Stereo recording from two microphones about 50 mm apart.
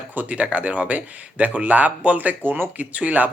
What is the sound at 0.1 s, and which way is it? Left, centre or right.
Speech, right.